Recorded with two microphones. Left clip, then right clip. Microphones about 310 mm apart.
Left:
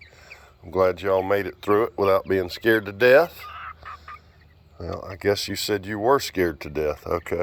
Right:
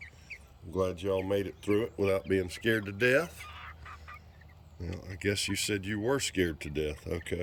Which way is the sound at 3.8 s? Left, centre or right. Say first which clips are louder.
Left 9 dB; centre.